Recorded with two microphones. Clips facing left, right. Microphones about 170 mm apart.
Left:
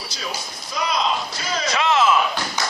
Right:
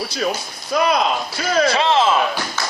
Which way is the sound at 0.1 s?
60° right (ahead or behind).